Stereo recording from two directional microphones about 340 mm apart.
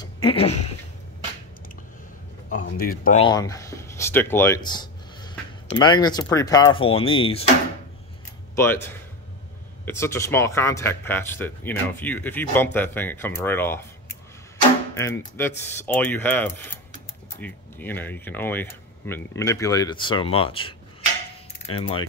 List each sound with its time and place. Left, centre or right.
0.0 s a sound: centre
0.5 s a sound: left
2.5 s speech: left
8.5 s speech: centre
15.0 s speech: centre
21.7 s speech: centre